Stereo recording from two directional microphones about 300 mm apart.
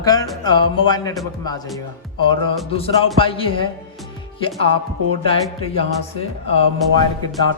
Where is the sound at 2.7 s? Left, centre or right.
Centre.